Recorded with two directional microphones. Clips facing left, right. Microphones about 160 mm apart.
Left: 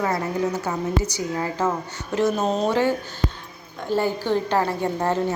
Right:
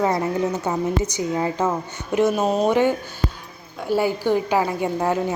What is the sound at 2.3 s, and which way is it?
Speech, 5° right (ahead or behind).